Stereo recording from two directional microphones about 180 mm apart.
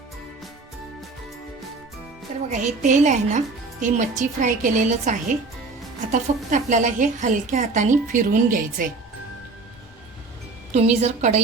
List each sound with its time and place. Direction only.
2.5 s a woman's voice: 40° right (ahead or behind)
10.7 s a woman's voice: 40° right (ahead or behind)